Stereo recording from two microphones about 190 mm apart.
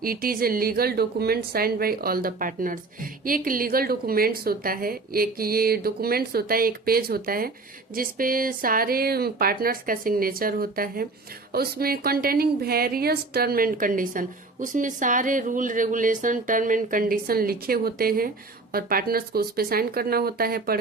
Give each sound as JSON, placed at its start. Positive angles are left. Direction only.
{"t": 0.0, "sound": "a woman's voice", "side_deg": -50}